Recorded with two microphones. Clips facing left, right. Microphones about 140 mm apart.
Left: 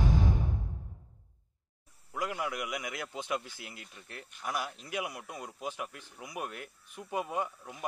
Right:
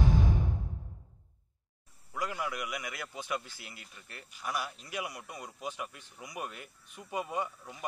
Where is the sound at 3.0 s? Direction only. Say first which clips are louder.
Left 2 dB; 20° left (ahead or behind).